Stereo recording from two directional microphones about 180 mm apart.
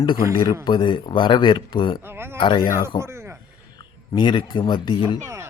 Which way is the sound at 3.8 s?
25° left (ahead or behind).